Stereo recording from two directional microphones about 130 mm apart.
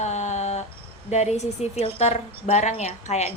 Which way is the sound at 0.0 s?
60° left (ahead or behind).